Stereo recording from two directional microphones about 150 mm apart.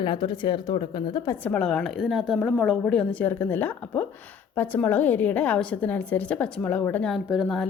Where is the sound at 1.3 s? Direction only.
10° left (ahead or behind).